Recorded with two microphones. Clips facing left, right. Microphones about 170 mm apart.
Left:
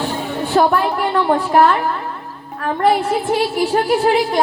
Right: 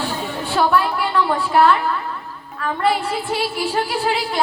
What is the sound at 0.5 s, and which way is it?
A woman's voice, 45° left (ahead or behind).